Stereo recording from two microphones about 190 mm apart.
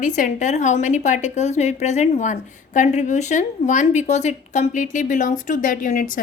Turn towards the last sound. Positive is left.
turn(degrees=45)  # may be behind; listen again after turning